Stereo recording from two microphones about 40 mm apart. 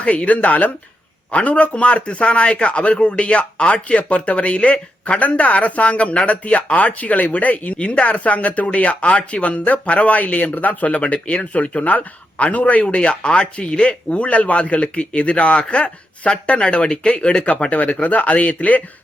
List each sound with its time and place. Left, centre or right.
0.0 s speech: left